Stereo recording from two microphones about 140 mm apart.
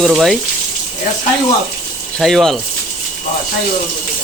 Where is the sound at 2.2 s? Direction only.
Centre (ahead or behind).